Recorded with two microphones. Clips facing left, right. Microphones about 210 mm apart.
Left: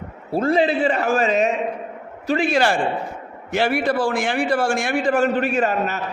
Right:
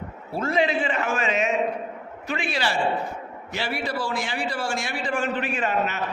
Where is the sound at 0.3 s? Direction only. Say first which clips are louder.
Left 5 dB; 30° left (ahead or behind).